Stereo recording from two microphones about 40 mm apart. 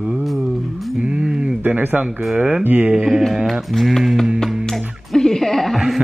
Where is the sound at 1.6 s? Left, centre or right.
Right.